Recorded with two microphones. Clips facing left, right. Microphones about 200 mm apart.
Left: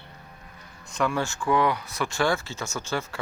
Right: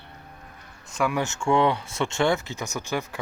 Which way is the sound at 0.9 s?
15° right (ahead or behind).